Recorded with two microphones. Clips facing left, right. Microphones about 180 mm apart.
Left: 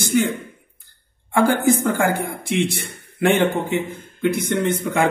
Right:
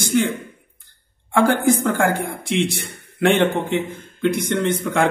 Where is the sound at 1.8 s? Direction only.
60° right (ahead or behind).